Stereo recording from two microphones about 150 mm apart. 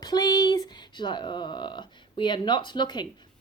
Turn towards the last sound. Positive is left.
turn(degrees=30)  # may be behind; listen again after turning